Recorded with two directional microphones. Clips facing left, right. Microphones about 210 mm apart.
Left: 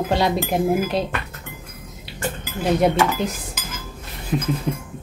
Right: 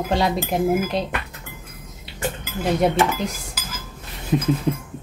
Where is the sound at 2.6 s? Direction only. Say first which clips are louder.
Left 1 dB; centre (ahead or behind).